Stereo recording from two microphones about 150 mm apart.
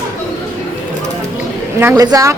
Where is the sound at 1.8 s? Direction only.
15° right (ahead or behind).